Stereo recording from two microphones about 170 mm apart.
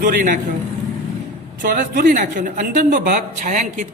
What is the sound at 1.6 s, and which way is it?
Speech, 55° right (ahead or behind).